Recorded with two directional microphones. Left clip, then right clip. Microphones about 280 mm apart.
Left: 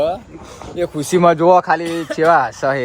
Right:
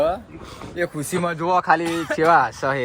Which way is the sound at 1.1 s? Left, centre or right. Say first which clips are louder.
Left 15 dB; left.